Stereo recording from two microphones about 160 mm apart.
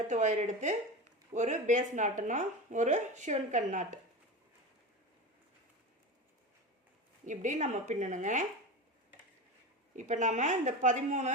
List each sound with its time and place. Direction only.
0.1 s speech: 50° right (ahead or behind)
7.3 s speech: 50° right (ahead or behind)
9.9 s speech: 50° right (ahead or behind)